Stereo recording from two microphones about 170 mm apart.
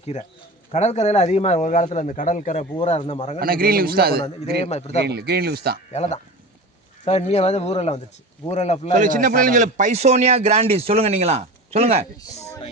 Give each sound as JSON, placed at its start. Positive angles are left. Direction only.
{"t": 0.0, "sound": "speech", "side_deg": 40}
{"t": 3.3, "sound": "a man's voice", "side_deg": -60}
{"t": 4.6, "sound": "speech", "side_deg": 40}
{"t": 4.9, "sound": "speech", "side_deg": -70}
{"t": 5.9, "sound": "speech", "side_deg": 40}
{"t": 8.9, "sound": "a man's voice", "side_deg": -50}